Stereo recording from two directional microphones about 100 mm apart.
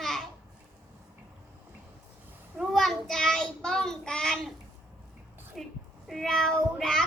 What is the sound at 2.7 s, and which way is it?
Child singing, 5° left (ahead or behind).